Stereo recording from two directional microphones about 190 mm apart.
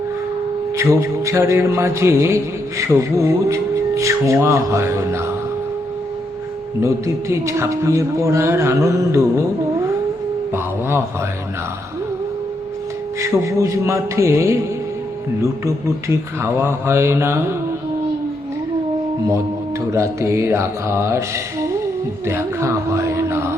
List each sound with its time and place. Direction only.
0.8 s mantra: 15° right (ahead or behind)
6.7 s mantra: 15° right (ahead or behind)
10.5 s a sound: 10° right (ahead or behind)
13.2 s mantra: 15° right (ahead or behind)
19.9 s mantra: 15° right (ahead or behind)
22.3 s a sound: 15° right (ahead or behind)